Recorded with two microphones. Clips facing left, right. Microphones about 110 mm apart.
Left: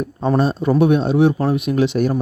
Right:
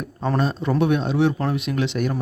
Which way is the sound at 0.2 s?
20° left (ahead or behind).